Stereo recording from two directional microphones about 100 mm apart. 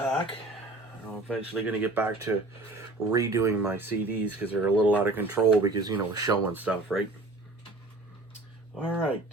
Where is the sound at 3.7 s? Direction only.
20° right (ahead or behind).